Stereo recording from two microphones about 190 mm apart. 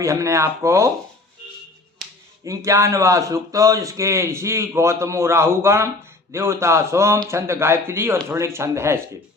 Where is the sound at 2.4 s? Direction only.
15° right (ahead or behind).